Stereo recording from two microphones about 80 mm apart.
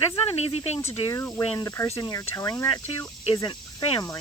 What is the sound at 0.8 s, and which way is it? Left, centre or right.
Speech, left.